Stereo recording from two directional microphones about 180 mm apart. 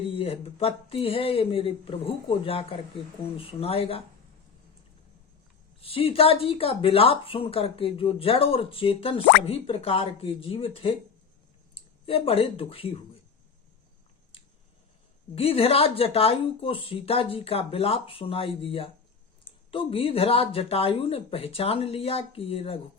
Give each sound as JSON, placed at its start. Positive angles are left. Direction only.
{"t": 0.1, "sound": "speech", "side_deg": 30}
{"t": 5.8, "sound": "speech", "side_deg": 30}
{"t": 15.4, "sound": "speech", "side_deg": 30}